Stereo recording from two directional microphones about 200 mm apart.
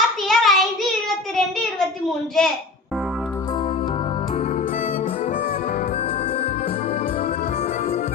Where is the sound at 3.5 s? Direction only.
25° left (ahead or behind).